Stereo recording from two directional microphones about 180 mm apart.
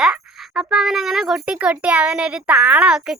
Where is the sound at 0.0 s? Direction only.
Centre (ahead or behind).